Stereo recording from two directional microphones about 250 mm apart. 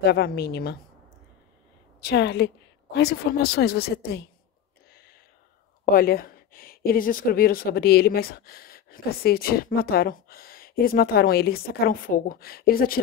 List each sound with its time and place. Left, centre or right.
0.0 s speech: left
2.0 s speech: left
5.9 s speech: left